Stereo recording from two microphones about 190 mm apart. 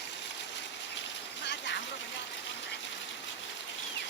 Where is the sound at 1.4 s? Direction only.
65° left (ahead or behind).